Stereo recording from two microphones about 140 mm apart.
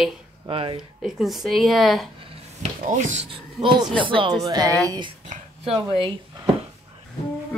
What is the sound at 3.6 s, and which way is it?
Speech, 35° right (ahead or behind).